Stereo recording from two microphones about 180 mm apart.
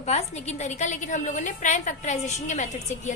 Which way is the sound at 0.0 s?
40° left (ahead or behind).